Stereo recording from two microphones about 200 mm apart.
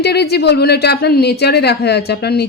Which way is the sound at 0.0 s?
55° left (ahead or behind).